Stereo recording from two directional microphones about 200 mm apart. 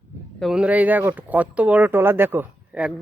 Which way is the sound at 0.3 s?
Centre (ahead or behind).